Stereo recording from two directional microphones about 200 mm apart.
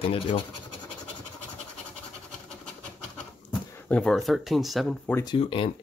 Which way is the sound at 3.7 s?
5° left (ahead or behind).